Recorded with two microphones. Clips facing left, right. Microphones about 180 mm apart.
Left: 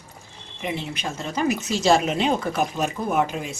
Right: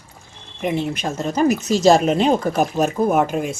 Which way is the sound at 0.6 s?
50° right (ahead or behind).